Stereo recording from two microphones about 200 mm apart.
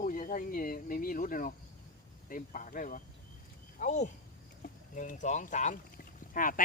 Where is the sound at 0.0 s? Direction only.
40° left (ahead or behind).